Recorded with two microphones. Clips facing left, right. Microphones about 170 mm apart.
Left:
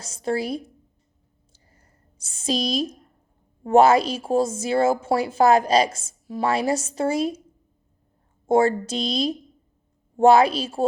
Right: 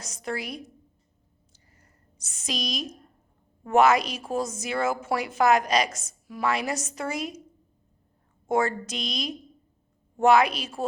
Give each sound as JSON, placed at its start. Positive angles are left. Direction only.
{"t": 0.0, "sound": "speech", "side_deg": 30}
{"t": 1.5, "sound": "a sound", "side_deg": 30}
{"t": 3.6, "sound": "speech", "side_deg": 30}
{"t": 8.4, "sound": "speech", "side_deg": 30}